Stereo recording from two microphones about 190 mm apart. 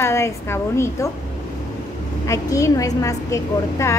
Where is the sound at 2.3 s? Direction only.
15° left (ahead or behind).